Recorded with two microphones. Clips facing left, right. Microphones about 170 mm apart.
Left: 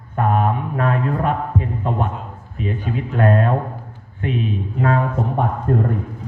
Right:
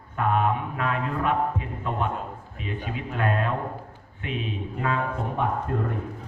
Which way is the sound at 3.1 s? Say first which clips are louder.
Left 8 dB; 45° left (ahead or behind).